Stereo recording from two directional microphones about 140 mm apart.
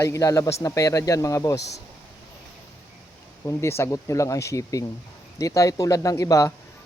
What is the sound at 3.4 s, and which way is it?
Speech, 20° left (ahead or behind).